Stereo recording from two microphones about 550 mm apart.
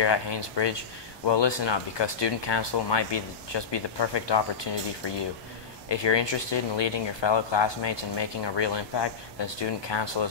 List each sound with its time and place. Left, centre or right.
0.0 s speech: left
5.9 s speech: left